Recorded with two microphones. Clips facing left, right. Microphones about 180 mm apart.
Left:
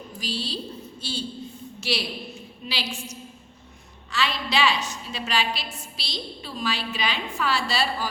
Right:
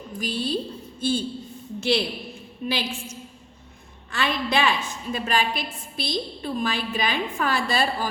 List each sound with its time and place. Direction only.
0.2 s a woman's voice: 50° right (ahead or behind)